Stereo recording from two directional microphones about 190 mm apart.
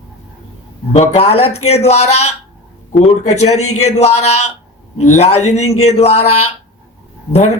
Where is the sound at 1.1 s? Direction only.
35° left (ahead or behind).